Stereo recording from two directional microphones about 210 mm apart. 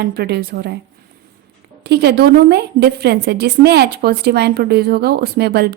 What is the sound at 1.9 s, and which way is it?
A woman's voice, 50° right (ahead or behind).